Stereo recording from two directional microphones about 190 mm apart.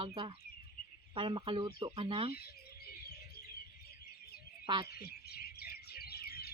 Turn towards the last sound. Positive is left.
turn(degrees=55)  # may be behind; listen again after turning